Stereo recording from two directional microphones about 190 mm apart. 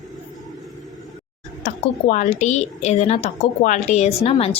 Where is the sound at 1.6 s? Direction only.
40° left (ahead or behind).